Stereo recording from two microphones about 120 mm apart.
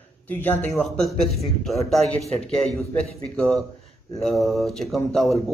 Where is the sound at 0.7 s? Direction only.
5° left (ahead or behind).